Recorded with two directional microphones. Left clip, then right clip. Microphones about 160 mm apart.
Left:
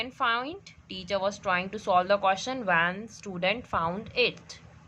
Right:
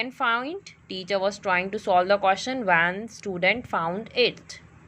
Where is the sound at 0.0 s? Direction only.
20° right (ahead or behind).